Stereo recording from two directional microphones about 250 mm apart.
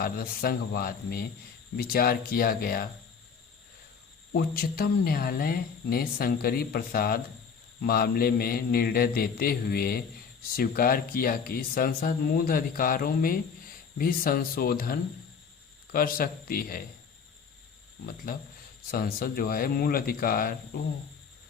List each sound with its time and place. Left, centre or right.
0.0 s speech: left
4.4 s speech: left
18.3 s speech: left